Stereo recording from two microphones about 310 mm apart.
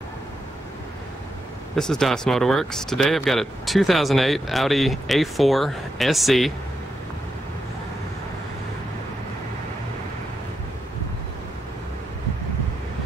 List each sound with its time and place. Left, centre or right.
1.8 s speech: centre